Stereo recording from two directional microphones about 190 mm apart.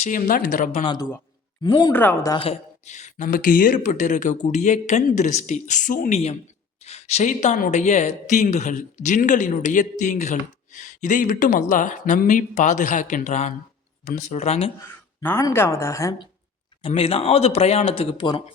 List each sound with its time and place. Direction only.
0.0 s speech: 45° left (ahead or behind)
1.6 s speech: 20° left (ahead or behind)
1.9 s a woman's voice: 10° left (ahead or behind)
2.3 s speech: 30° left (ahead or behind)
15.2 s a woman's voice: 15° left (ahead or behind)
16.8 s speech: 30° left (ahead or behind)